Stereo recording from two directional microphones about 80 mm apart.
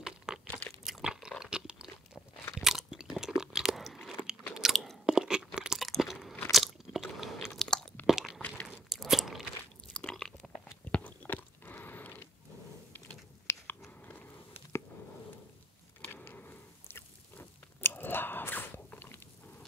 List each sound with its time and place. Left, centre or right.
0.0 s crunch: centre
2.5 s chewing: centre
5.0 s crunch: centre
7.5 s chewing: centre
8.1 s a sound: centre
8.4 s a sound: centre
8.6 s crunch: centre
9.9 s chewing: centre
10.9 s chewing: left
13.5 s biting: left
16.3 s chewing: left